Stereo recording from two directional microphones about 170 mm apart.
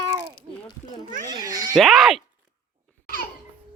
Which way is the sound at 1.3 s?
25° right (ahead or behind).